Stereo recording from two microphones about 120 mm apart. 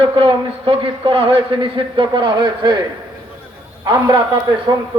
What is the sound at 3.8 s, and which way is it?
Speech, 40° right (ahead or behind).